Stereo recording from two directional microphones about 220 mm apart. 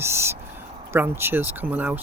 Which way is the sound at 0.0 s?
10° right (ahead or behind).